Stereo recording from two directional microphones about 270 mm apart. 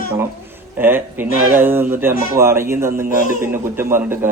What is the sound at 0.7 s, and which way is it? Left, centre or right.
Speech, centre.